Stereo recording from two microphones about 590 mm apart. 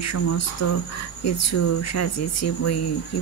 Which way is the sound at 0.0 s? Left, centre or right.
Left.